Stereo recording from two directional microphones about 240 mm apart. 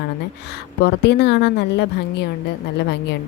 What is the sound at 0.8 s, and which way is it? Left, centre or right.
A woman's voice, left.